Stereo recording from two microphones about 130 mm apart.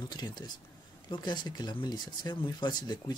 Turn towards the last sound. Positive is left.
turn(degrees=35)  # may be behind; listen again after turning